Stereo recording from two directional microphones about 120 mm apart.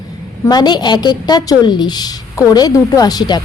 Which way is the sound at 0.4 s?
35° left (ahead or behind).